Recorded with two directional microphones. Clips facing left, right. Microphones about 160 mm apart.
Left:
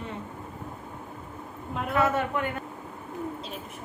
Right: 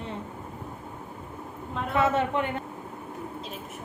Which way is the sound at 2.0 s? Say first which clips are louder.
Right 1 dB; 25° right (ahead or behind).